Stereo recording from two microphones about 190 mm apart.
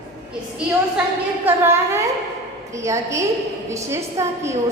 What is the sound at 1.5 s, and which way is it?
A woman's voice, 10° right (ahead or behind).